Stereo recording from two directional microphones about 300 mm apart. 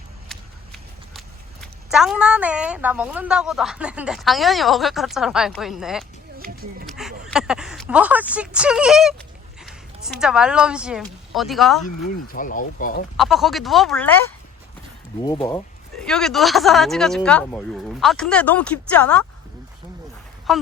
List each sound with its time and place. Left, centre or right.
0.3 s a sound: centre
1.9 s a woman's voice: centre
12.0 s speech: left
13.1 s a woman's voice: centre
15.4 s a woman's voice: centre
20.5 s speech: centre